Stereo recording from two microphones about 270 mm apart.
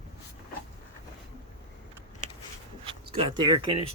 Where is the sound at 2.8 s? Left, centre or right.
Right.